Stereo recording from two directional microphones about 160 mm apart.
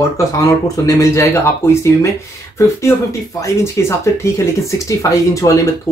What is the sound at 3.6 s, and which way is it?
Speech, 15° left (ahead or behind).